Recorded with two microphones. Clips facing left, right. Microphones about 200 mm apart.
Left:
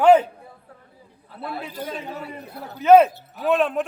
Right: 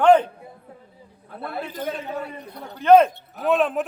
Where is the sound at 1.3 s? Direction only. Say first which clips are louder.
Left 1 dB; 55° right (ahead or behind).